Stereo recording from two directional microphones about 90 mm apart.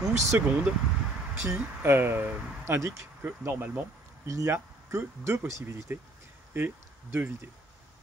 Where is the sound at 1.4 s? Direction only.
25° right (ahead or behind).